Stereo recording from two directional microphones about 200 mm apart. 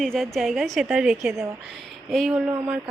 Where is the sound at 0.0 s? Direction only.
Centre (ahead or behind).